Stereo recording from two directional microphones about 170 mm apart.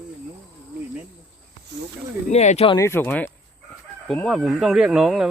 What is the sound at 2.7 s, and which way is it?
Speech, 15° left (ahead or behind).